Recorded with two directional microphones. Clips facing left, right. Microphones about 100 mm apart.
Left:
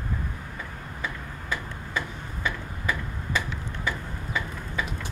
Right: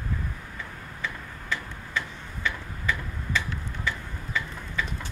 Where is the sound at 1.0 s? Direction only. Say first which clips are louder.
Even; 15° left (ahead or behind).